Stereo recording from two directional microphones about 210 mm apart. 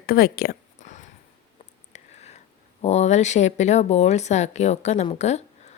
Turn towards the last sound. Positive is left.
turn(degrees=30)  # may be behind; listen again after turning